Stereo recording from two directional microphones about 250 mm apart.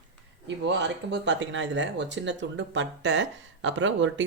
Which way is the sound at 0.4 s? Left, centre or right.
Right.